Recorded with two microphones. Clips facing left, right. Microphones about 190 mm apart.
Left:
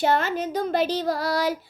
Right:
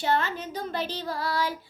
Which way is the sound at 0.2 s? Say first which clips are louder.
Left 5 dB; 85° left.